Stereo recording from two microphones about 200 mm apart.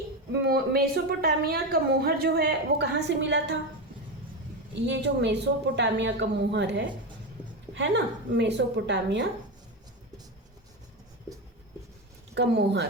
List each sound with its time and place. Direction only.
0.4 s a woman's voice: 50° right (ahead or behind)
4.9 s a woman's voice: 60° right (ahead or behind)
12.3 s a woman's voice: 60° right (ahead or behind)